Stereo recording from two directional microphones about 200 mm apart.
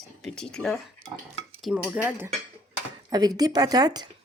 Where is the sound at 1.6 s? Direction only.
5° right (ahead or behind).